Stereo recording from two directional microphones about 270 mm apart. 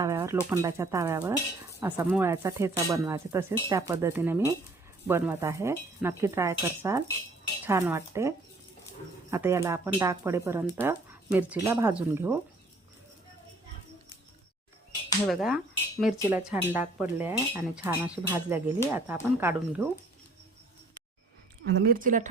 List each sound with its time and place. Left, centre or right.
0.0 s pigeon: centre
0.5 s speech: centre
9.3 s speech: centre
15.3 s speech: centre
21.6 s a woman's voice: right